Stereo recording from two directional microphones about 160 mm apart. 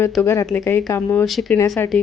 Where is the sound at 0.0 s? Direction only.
15° left (ahead or behind).